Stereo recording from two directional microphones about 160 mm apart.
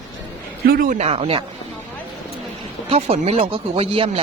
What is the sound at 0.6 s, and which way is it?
Speech, 70° right (ahead or behind).